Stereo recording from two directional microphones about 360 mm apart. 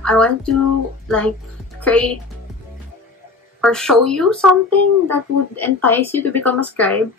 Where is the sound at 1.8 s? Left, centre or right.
Centre.